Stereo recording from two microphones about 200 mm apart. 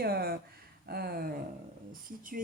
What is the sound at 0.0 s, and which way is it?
Speech, 50° right (ahead or behind).